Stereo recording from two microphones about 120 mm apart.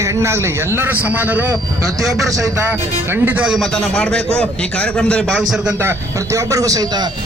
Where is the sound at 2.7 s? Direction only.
15° right (ahead or behind).